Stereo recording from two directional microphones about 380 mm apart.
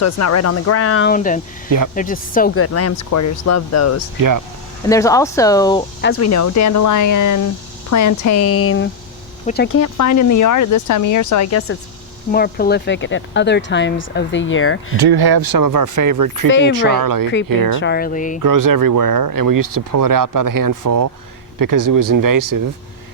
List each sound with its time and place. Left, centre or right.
0.0 s speech: left
1.1 s speech: left
2.6 s speech: left
4.2 s speech: right
4.9 s speech: centre
6.0 s speech: left
6.2 s speech: left
12.3 s speech: left
14.9 s speech: right
16.5 s speech: left
16.7 s speech: right
17.7 s speech: left
18.4 s speech: right